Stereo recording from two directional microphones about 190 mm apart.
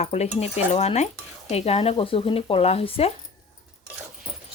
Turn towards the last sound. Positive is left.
turn(degrees=30)  # may be behind; listen again after turning